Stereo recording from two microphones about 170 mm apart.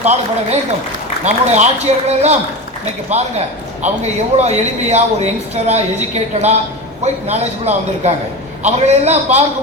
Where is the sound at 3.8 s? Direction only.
40° right (ahead or behind).